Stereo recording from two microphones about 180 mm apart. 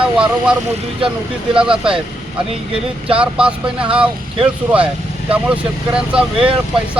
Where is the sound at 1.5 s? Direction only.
5° right (ahead or behind).